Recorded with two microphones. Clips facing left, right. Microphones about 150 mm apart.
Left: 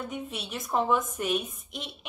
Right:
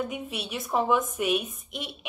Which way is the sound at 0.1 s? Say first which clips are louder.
Right 2 dB; 5° right (ahead or behind).